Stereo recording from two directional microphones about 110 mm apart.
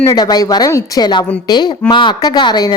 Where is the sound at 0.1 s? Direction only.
40° left (ahead or behind).